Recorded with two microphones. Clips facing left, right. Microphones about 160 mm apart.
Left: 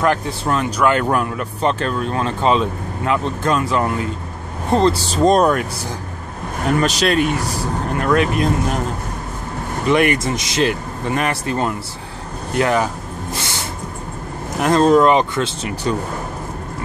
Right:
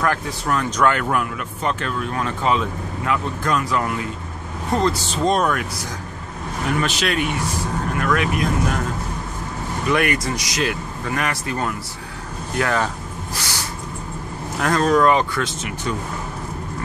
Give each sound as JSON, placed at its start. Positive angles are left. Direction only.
{"t": 0.0, "sound": "speech", "side_deg": 20}
{"t": 0.7, "sound": "speech", "side_deg": 10}
{"t": 0.9, "sound": "speech", "side_deg": 30}
{"t": 6.8, "sound": "speech", "side_deg": 40}
{"t": 9.8, "sound": "speech", "side_deg": 25}